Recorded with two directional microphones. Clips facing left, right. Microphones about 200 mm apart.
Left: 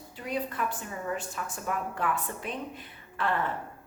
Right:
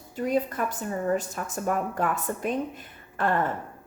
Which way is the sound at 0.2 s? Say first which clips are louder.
Right 6 dB; 45° right (ahead or behind).